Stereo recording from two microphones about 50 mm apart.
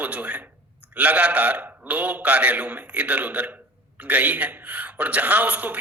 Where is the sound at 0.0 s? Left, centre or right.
Right.